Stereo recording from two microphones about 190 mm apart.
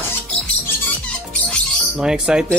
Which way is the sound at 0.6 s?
5° left (ahead or behind).